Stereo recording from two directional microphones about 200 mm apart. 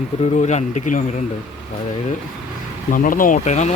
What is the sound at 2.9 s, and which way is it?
Speech, 45° left (ahead or behind).